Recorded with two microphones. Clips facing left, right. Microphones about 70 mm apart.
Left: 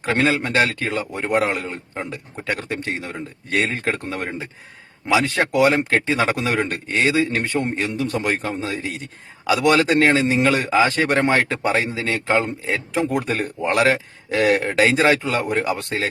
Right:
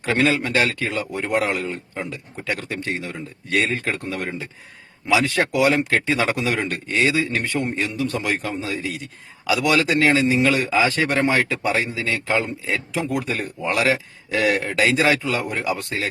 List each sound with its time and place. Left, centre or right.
0.0 s a man's voice: left
15.5 s a man's voice: left